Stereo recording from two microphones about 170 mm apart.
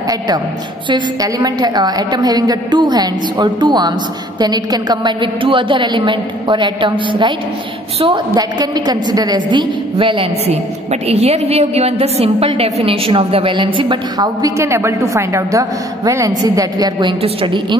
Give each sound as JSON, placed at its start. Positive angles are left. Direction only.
{"t": 0.8, "sound": "a woman's voice", "side_deg": -25}